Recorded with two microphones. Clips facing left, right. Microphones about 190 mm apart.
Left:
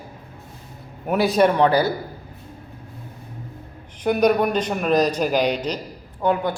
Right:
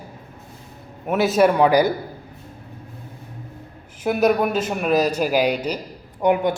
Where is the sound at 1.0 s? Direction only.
Centre (ahead or behind).